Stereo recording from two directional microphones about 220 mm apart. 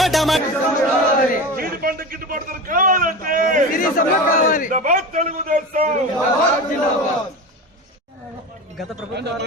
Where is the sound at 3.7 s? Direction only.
40° left (ahead or behind).